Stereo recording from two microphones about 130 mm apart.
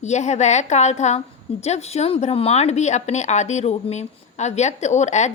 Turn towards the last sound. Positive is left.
turn(degrees=65)  # may be behind; listen again after turning